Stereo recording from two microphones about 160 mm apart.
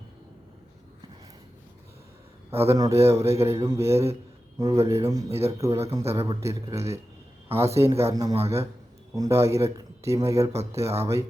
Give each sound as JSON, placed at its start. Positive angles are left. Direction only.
{"t": 2.6, "sound": "speech", "side_deg": -20}